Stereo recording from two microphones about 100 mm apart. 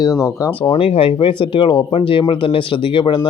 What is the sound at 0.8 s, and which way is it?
Speech, 70° left (ahead or behind).